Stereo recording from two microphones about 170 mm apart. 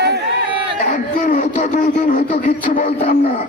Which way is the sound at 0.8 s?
45° left (ahead or behind).